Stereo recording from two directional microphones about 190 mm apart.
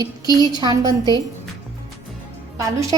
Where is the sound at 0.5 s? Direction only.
20° right (ahead or behind).